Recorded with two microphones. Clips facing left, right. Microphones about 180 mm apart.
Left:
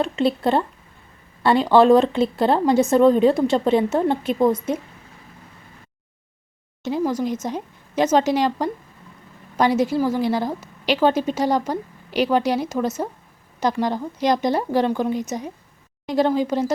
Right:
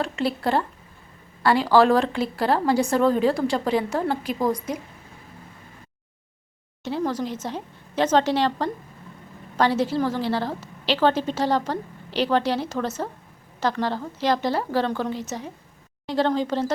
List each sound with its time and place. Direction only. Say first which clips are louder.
0.0 s a woman's voice: left 5 dB; 20° left (ahead or behind)
6.8 s a woman's voice: left 4 dB; 10° left (ahead or behind)